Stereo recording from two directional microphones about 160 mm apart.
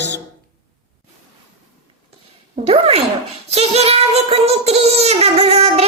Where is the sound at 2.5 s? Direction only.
40° right (ahead or behind).